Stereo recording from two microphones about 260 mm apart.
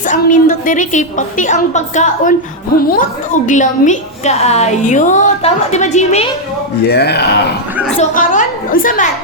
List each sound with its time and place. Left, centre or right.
0.1 s a woman's voice: left
6.8 s a woman's voice: left